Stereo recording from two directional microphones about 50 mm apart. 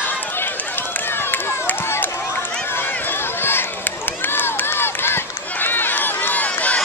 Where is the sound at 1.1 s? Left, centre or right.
Left.